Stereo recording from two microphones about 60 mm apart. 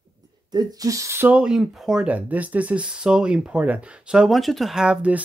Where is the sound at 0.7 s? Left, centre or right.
Right.